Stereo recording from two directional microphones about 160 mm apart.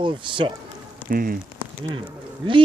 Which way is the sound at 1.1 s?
65° right (ahead or behind).